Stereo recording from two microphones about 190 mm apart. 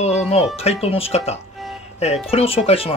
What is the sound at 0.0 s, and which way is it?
Speech, 35° left (ahead or behind).